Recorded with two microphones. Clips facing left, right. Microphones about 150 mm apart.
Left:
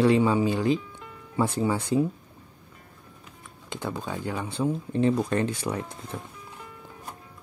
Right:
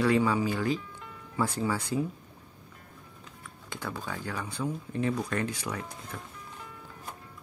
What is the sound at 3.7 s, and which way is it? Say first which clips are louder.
Speech: left 5 dB; 20° left (ahead or behind).